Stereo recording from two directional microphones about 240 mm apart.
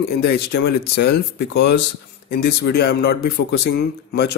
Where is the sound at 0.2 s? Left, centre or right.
Left.